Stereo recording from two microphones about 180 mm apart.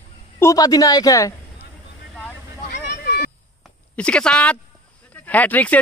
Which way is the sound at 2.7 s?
60° left (ahead or behind).